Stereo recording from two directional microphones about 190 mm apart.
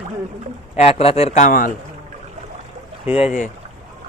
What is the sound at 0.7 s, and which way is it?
Speech, 35° left (ahead or behind).